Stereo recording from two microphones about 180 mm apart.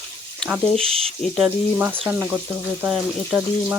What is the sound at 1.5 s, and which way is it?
Speech, 10° right (ahead or behind).